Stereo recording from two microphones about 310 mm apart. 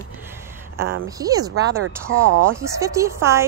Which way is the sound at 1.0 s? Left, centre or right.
Centre.